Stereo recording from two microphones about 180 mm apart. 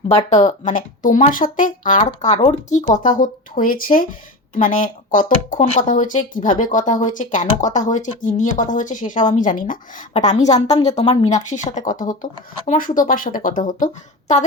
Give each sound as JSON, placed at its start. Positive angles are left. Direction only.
{"t": 0.3, "sound": "speech", "side_deg": 40}